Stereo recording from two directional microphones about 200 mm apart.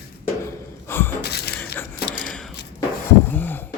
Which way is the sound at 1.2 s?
55° left (ahead or behind).